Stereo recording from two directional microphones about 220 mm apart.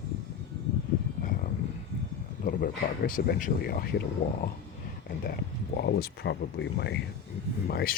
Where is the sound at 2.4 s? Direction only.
40° left (ahead or behind).